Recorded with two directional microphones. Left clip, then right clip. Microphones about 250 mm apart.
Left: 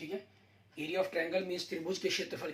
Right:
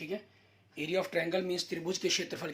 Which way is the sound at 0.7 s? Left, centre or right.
Right.